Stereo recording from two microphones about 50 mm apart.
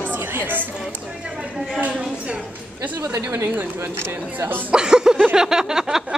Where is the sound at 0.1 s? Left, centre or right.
Right.